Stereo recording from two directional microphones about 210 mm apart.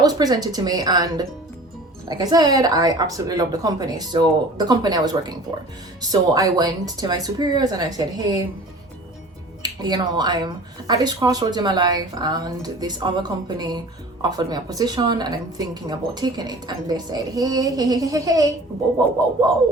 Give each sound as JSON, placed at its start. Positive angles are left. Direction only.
{"t": 0.0, "sound": "a woman's voice", "side_deg": -20}
{"t": 9.6, "sound": "speech", "side_deg": -20}